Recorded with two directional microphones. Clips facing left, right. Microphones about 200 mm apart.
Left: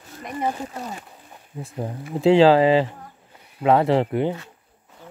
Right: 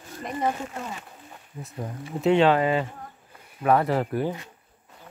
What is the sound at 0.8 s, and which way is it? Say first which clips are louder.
Speech: left 2 dB; 35° left (ahead or behind).